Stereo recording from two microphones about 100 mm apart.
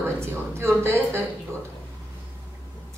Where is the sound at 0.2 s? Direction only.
25° right (ahead or behind).